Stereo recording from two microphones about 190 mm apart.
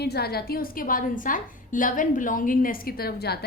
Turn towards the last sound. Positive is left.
turn(degrees=55)  # may be behind; listen again after turning